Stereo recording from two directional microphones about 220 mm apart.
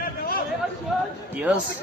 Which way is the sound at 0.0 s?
40° left (ahead or behind).